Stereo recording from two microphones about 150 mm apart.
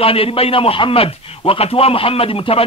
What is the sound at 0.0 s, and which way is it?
A man's voice, 40° left (ahead or behind).